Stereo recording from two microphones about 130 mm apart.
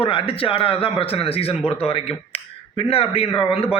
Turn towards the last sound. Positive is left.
turn(degrees=50)  # may be behind; listen again after turning